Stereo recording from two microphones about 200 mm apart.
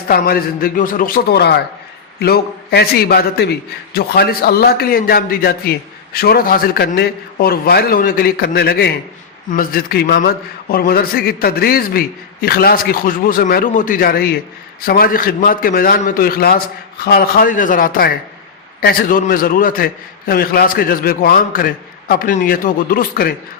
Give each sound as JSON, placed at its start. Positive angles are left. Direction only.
{"t": 0.1, "sound": "a man's voice", "side_deg": 50}